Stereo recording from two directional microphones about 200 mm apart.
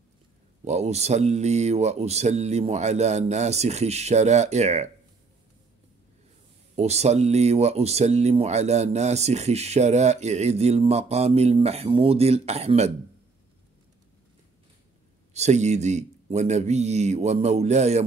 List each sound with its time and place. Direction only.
0.7 s speech: 35° right (ahead or behind)
6.7 s speech: 30° right (ahead or behind)
15.3 s speech: 35° right (ahead or behind)